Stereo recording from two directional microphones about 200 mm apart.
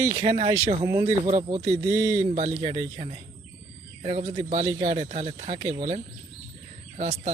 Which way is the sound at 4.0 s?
20° right (ahead or behind).